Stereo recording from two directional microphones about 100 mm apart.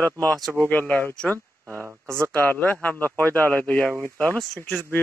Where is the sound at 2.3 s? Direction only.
20° left (ahead or behind).